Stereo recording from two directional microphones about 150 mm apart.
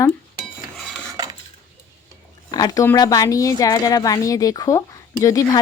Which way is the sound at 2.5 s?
25° left (ahead or behind).